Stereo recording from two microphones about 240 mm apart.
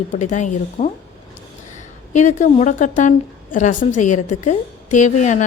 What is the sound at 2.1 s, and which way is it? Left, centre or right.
A woman's voice, left.